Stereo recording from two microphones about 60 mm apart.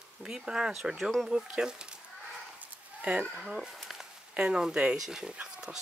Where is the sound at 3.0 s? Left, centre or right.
Right.